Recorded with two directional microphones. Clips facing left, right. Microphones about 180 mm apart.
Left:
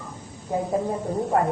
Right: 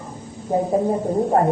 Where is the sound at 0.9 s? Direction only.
35° right (ahead or behind).